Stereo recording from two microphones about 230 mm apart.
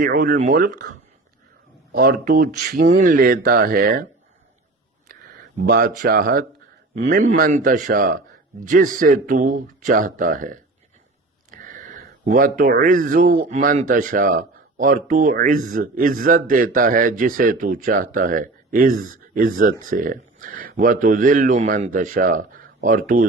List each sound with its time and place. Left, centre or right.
0.0 s speech: right